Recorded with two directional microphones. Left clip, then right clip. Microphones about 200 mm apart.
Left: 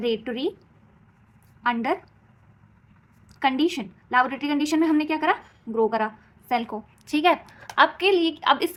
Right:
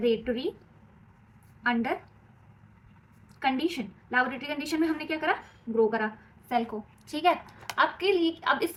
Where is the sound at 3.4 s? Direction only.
50° left (ahead or behind).